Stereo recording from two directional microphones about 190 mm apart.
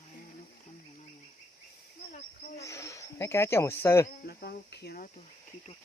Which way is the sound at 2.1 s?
40° left (ahead or behind).